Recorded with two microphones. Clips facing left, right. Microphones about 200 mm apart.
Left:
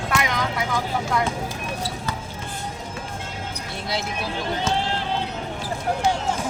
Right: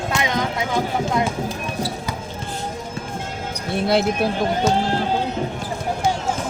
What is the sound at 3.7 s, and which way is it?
Speech, 55° right (ahead or behind).